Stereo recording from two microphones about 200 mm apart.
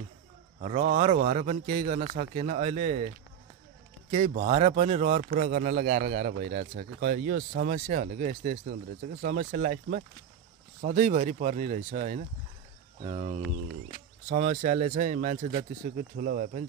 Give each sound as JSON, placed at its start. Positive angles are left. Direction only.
{"t": 0.6, "sound": "speech", "side_deg": -35}
{"t": 4.1, "sound": "speech", "side_deg": -40}